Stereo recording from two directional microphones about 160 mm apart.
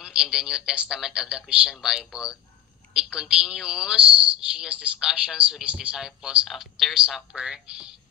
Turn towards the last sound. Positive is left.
turn(degrees=-5)  # may be behind; listen again after turning